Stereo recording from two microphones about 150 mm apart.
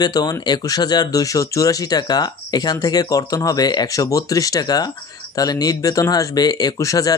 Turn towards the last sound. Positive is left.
turn(degrees=25)  # may be behind; listen again after turning